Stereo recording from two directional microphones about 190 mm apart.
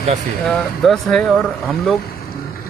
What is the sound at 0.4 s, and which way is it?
Speech, centre (ahead or behind).